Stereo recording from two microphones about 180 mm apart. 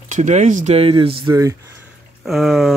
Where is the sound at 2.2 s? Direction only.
Centre (ahead or behind).